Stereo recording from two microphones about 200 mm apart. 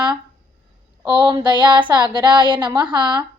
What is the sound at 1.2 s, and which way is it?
Speech, 25° right (ahead or behind).